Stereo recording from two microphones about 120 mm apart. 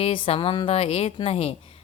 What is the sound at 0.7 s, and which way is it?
Speech, 55° left (ahead or behind).